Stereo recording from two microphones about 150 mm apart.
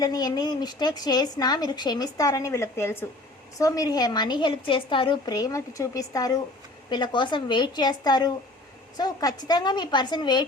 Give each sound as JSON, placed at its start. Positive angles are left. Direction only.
{"t": 0.0, "sound": "a woman's voice", "side_deg": 25}